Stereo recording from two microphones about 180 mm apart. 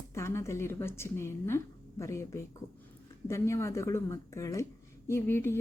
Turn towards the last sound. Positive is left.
turn(degrees=15)  # may be behind; listen again after turning